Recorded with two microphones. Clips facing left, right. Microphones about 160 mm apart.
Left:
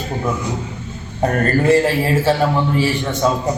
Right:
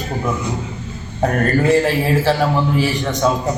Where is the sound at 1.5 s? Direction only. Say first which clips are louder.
Left 1 dB; centre (ahead or behind).